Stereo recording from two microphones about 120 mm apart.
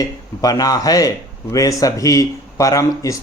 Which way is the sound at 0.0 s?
30° left (ahead or behind).